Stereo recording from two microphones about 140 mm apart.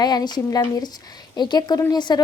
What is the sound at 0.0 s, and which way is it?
A woman's voice, 30° left (ahead or behind).